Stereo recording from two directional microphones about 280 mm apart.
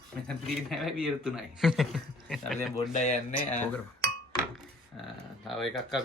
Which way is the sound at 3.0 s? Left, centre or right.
Left.